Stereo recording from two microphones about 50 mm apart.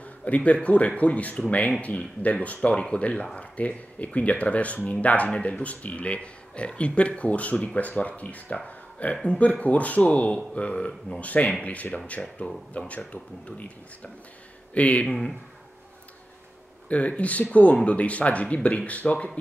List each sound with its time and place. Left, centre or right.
0.0 s speech: left
9.1 s speech: centre
9.4 s speech: left
16.9 s speech: left